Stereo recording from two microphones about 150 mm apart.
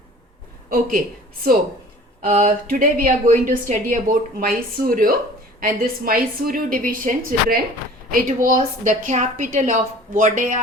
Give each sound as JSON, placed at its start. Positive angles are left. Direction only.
{"t": 0.7, "sound": "speech", "side_deg": -70}
{"t": 2.6, "sound": "a woman's voice", "side_deg": -65}